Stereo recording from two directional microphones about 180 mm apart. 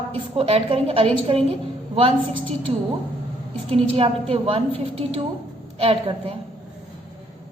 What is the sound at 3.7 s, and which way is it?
A woman's voice, 30° right (ahead or behind).